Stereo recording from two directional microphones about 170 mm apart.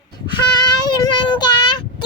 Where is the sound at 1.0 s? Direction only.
25° left (ahead or behind).